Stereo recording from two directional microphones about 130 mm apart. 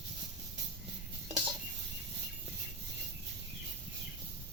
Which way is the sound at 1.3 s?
40° right (ahead or behind).